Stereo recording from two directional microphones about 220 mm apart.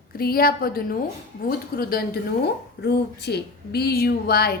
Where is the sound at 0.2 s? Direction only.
45° left (ahead or behind).